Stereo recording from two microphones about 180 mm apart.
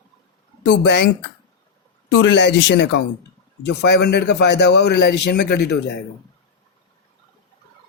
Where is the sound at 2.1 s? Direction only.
80° left.